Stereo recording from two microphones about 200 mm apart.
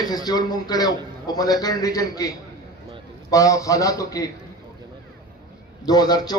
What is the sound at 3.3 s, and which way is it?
Speech, 15° left (ahead or behind).